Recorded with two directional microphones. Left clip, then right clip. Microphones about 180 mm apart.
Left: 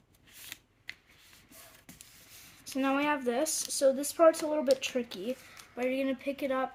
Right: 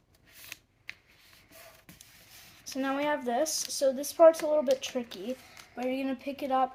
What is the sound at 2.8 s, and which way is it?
Speech, 45° left (ahead or behind).